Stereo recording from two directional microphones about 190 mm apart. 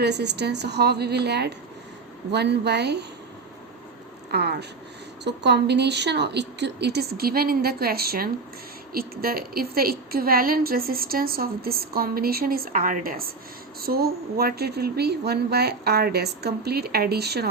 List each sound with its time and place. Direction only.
0.0 s speech: 60° right (ahead or behind)
4.3 s a woman's voice: 60° right (ahead or behind)